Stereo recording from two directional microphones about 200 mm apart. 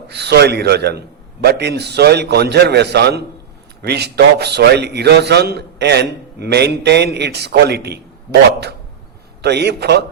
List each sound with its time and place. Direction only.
0.1 s a man's voice: 55° right (ahead or behind)